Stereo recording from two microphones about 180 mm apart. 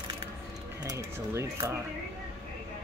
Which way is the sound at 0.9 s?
20° right (ahead or behind).